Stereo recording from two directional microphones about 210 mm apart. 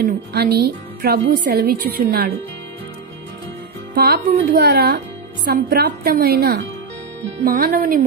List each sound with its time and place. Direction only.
0.3 s speech: 50° right (ahead or behind)
3.9 s speech: 50° right (ahead or behind)